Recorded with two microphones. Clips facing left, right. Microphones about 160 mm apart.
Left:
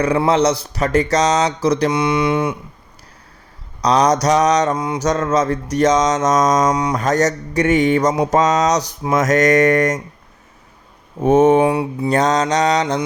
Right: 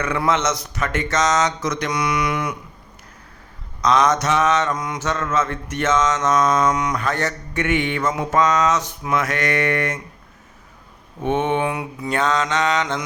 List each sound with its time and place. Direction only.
0.0 s mantra: 35° left (ahead or behind)
3.8 s mantra: 35° left (ahead or behind)
11.2 s mantra: 40° left (ahead or behind)